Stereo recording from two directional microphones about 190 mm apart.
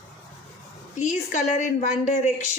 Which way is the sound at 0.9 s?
40° left (ahead or behind).